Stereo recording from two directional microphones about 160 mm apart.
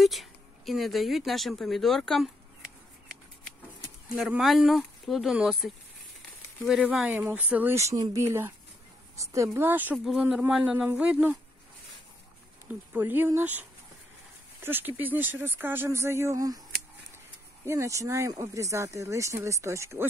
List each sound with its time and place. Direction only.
0.0 s speech: centre (ahead or behind)
4.2 s speech: centre (ahead or behind)
10.0 s speech: centre (ahead or behind)
12.6 s speech: 10° right (ahead or behind)
17.6 s speech: 20° right (ahead or behind)